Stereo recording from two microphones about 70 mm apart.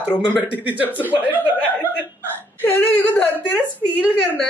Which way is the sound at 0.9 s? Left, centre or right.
Right.